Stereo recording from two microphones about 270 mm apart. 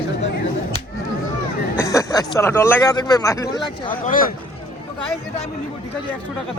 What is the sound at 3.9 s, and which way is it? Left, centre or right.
Speech, left.